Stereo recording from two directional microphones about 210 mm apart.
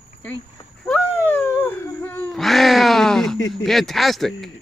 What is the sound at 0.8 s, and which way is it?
Wail, 5° left (ahead or behind).